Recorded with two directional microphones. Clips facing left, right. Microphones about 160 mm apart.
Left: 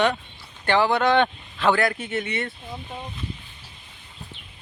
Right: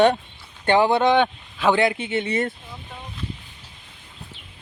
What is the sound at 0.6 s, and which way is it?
Speech, 20° right (ahead or behind).